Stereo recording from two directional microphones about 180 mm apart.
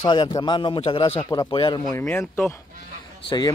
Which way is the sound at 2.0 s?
10° left (ahead or behind).